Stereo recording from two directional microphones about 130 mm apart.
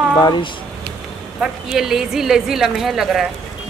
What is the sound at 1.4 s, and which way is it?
A woman's voice, 5° right (ahead or behind).